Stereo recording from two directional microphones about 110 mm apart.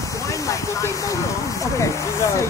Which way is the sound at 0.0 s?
30° left (ahead or behind).